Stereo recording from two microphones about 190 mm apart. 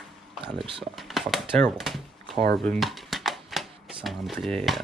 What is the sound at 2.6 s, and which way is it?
Typewriter, centre (ahead or behind).